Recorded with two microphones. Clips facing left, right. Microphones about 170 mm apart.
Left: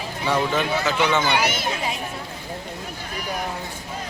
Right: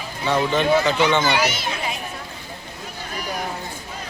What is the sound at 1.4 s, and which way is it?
Speech, 55° left (ahead or behind).